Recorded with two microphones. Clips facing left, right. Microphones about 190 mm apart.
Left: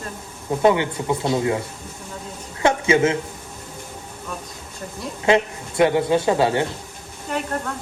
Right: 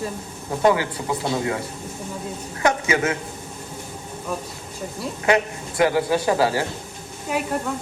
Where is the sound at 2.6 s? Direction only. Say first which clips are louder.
Left 3 dB; 25° left (ahead or behind).